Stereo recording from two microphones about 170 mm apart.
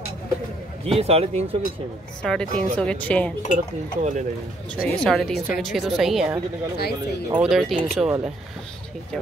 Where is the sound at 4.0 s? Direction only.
45° right (ahead or behind).